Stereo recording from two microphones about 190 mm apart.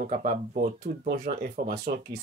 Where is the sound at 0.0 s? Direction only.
45° right (ahead or behind).